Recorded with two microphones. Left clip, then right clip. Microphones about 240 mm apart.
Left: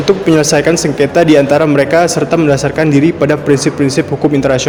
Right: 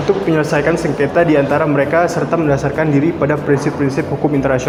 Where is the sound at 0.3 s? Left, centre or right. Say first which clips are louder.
Left 5 dB; left.